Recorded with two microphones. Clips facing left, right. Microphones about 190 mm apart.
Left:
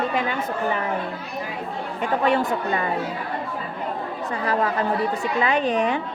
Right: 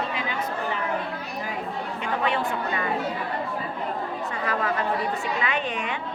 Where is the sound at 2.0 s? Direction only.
45° left (ahead or behind).